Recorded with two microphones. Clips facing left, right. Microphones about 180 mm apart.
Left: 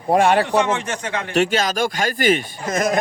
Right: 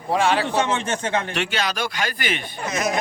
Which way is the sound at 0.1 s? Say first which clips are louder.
Left 5 dB; 50° left (ahead or behind).